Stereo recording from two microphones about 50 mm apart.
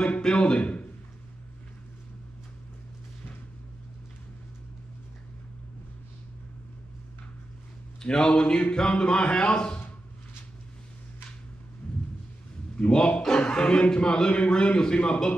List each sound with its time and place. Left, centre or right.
0.2 s a man's voice: centre
8.0 s speech: centre
12.7 s a man's voice: left